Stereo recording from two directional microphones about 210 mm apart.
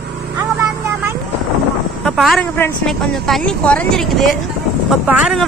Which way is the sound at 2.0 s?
Centre (ahead or behind).